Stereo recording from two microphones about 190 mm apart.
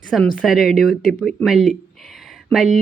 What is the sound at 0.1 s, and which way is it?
Speech, centre (ahead or behind).